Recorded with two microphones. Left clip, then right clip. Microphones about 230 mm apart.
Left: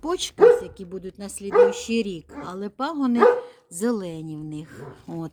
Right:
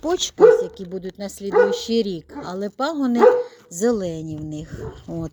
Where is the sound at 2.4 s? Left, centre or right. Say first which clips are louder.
Right 4 dB; centre.